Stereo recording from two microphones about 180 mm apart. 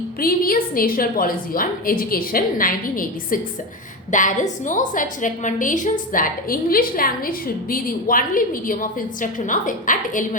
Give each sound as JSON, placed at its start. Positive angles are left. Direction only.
{"t": 0.2, "sound": "a woman's voice", "side_deg": 55}